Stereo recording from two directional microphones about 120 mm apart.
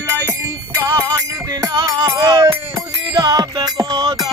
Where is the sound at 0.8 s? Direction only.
30° right (ahead or behind).